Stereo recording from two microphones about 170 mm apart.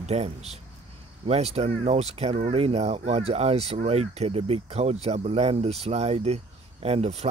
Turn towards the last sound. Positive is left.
turn(degrees=-40)  # may be behind; listen again after turning